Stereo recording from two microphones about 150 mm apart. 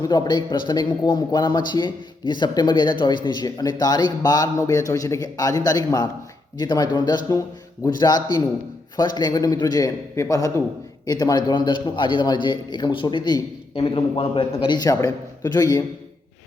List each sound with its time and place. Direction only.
0.0 s a man's voice: 30° left (ahead or behind)
14.8 s speech: 25° left (ahead or behind)